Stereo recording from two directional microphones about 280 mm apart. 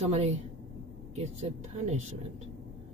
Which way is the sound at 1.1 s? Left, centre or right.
Right.